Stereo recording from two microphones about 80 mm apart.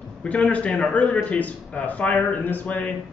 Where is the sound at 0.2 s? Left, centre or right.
Centre.